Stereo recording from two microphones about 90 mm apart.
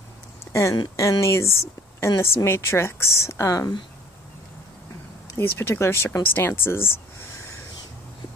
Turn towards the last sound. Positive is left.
turn(degrees=25)  # may be behind; listen again after turning